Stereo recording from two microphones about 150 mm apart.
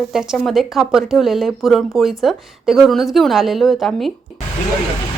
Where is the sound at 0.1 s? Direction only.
5° right (ahead or behind).